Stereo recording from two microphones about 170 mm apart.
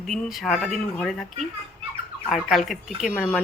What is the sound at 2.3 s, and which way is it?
A woman's voice, centre (ahead or behind).